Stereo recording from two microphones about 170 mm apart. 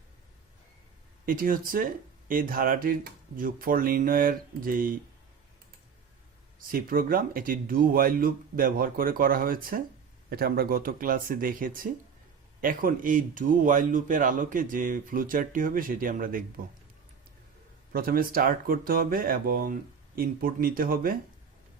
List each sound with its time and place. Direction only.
1.2 s speech: 55° right (ahead or behind)
6.7 s speech: 55° right (ahead or behind)
17.9 s speech: 60° right (ahead or behind)